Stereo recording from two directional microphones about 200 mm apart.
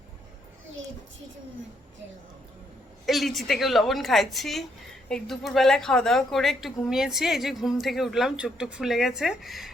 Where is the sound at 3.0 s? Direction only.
Centre (ahead or behind).